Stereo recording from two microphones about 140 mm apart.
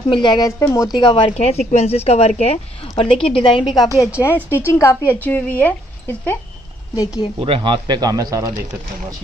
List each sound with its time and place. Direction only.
0.1 s speech: 35° left (ahead or behind)
0.6 s a woman's voice: 20° left (ahead or behind)
0.9 s speech: 35° left (ahead or behind)
1.3 s a woman's voice: 50° left (ahead or behind)
3.8 s a woman's voice: 25° left (ahead or behind)
7.3 s speech: 40° right (ahead or behind)